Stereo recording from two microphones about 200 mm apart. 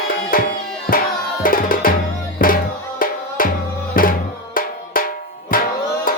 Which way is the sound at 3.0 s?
45° left (ahead or behind).